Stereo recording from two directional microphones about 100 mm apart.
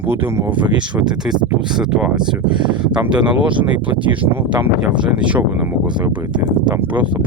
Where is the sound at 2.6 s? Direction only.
50° right (ahead or behind).